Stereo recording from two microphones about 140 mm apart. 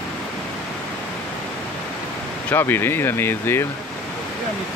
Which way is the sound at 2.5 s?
15° left (ahead or behind).